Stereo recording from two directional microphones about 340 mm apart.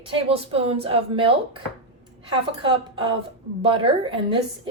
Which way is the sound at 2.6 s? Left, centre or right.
Centre.